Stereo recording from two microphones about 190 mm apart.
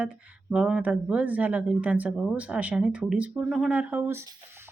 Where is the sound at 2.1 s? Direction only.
5° left (ahead or behind).